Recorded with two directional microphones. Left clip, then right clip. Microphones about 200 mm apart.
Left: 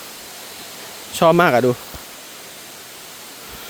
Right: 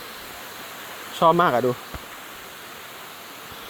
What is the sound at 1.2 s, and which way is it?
Speech, 45° left (ahead or behind).